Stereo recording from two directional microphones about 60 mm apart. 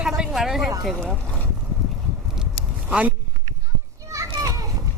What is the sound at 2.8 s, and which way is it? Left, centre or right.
Speech, right.